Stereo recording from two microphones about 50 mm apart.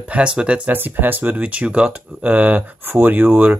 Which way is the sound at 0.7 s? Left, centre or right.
Right.